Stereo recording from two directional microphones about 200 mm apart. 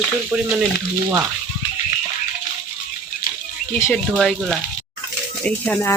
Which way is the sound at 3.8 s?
5° left (ahead or behind).